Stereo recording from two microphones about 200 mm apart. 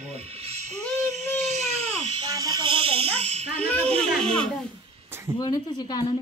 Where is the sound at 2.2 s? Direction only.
20° right (ahead or behind).